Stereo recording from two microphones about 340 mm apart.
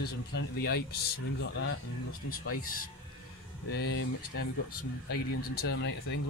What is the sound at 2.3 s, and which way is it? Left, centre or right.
Speech, left.